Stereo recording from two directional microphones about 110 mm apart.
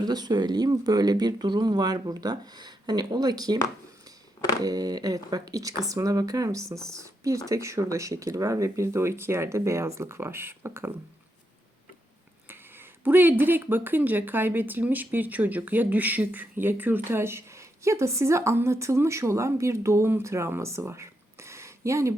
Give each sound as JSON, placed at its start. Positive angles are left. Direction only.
{"t": 0.0, "sound": "speech", "side_deg": -35}
{"t": 4.6, "sound": "speech", "side_deg": -35}
{"t": 6.7, "sound": "speech", "side_deg": 5}
{"t": 7.0, "sound": "a woman's voice", "side_deg": -30}
{"t": 13.1, "sound": "a woman's voice", "side_deg": -15}